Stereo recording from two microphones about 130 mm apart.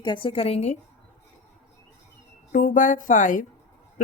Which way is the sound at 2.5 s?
90° left.